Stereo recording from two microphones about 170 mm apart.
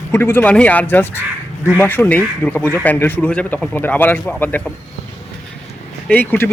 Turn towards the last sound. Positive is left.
turn(degrees=10)  # may be behind; listen again after turning